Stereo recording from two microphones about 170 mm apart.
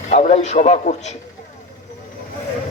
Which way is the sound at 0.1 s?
45° left (ahead or behind).